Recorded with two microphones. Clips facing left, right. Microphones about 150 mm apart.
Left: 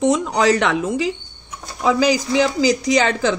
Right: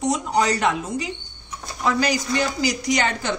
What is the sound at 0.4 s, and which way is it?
Speech, 90° left.